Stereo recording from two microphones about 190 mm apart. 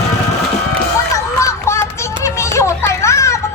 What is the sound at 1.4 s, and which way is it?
Music, 15° left (ahead or behind).